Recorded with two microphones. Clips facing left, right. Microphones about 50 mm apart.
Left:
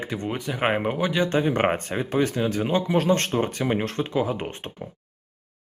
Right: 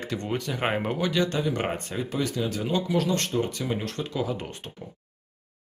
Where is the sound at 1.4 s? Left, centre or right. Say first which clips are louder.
Left 5 dB; left.